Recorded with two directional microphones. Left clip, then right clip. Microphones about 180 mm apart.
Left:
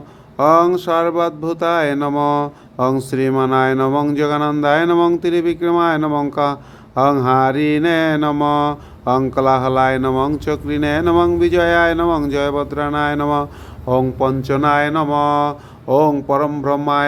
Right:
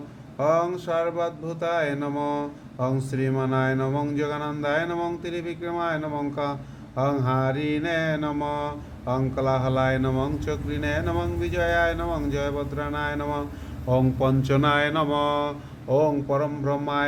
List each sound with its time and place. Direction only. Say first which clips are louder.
0.3 s speech: left 10 dB; 60° left (ahead or behind)
13.8 s speech: left 7 dB; 40° left (ahead or behind)